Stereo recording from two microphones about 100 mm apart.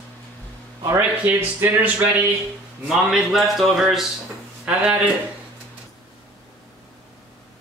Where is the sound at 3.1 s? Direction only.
Centre (ahead or behind).